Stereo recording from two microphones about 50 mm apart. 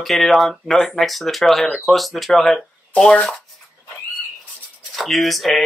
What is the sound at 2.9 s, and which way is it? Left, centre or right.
Speech, left.